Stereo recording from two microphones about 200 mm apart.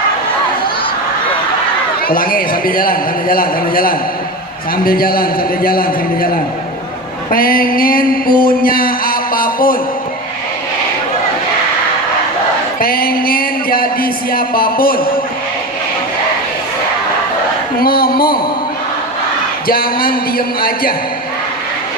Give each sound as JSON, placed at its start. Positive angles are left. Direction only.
{"t": 2.0, "sound": "speech", "side_deg": 45}
{"t": 7.3, "sound": "a sound", "side_deg": 45}
{"t": 12.8, "sound": "speech", "side_deg": 50}
{"t": 17.7, "sound": "speech", "side_deg": 45}
{"t": 19.6, "sound": "speech", "side_deg": 45}